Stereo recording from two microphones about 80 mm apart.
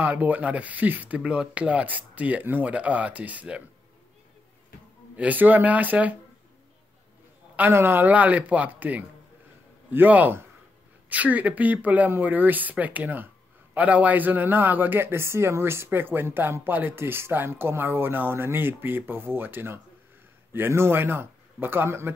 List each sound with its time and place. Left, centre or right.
0.0 s speech: right
5.1 s speech: centre
7.5 s speech: right